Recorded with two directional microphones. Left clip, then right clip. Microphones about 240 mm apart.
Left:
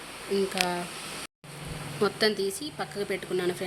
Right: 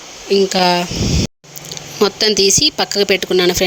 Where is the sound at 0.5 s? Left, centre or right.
Right.